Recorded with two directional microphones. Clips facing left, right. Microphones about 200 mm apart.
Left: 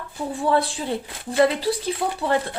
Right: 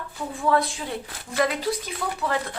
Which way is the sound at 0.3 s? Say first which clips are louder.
Left 2 dB; 30° left (ahead or behind).